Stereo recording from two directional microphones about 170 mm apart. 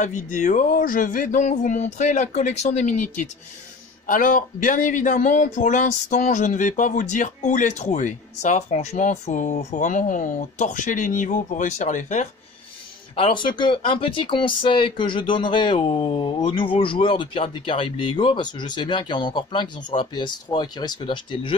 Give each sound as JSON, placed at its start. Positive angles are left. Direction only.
{"t": 0.0, "sound": "speech", "side_deg": 50}
{"t": 13.1, "sound": "speech", "side_deg": 30}